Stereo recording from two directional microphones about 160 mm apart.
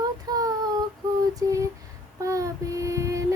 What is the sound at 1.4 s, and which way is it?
Female singing, 20° right (ahead or behind).